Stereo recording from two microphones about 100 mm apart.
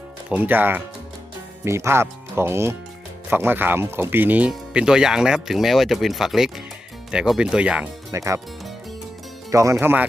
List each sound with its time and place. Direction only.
0.3 s speech: 15° right (ahead or behind)
8.1 s speech: 30° right (ahead or behind)
9.5 s speech: 35° right (ahead or behind)
9.8 s speech: 20° right (ahead or behind)